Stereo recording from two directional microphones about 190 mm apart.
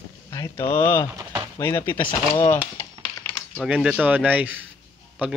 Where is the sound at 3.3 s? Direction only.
5° left (ahead or behind).